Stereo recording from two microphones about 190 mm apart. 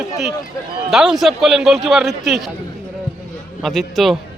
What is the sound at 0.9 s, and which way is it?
A man's voice, centre (ahead or behind).